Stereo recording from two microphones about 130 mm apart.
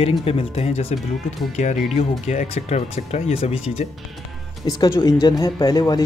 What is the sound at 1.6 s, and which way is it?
Speech, 65° left (ahead or behind).